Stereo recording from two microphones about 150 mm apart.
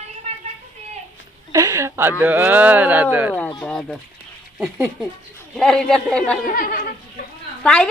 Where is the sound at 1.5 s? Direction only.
20° right (ahead or behind).